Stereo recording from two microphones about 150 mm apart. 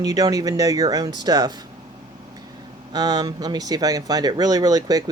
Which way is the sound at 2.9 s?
25° right (ahead or behind).